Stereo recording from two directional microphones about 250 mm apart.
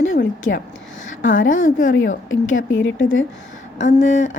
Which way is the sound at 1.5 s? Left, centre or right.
Left.